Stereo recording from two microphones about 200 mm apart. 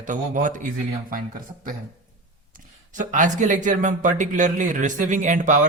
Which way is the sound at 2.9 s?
40° right (ahead or behind).